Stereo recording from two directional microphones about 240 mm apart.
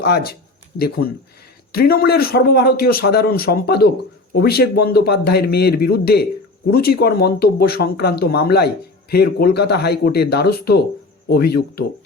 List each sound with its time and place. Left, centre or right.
0.0 s speech: left